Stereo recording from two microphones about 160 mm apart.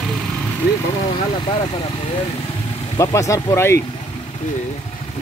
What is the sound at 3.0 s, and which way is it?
Speech, 20° left (ahead or behind).